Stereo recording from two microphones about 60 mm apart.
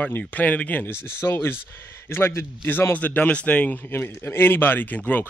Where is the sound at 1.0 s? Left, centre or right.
Left.